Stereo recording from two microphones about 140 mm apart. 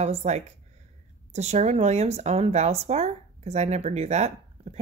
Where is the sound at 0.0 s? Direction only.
50° right (ahead or behind).